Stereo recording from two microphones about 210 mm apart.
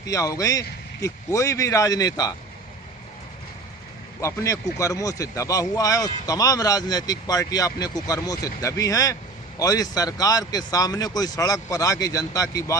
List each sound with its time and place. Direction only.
0.0 s speech: 15° left (ahead or behind)
4.2 s speech: 15° left (ahead or behind)